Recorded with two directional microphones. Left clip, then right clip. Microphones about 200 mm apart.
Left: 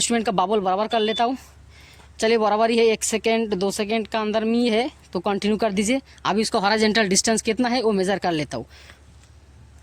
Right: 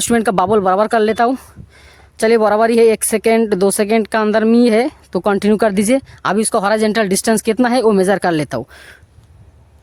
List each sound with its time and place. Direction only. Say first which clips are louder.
0.0 s speech: right 7 dB; 40° right (ahead or behind)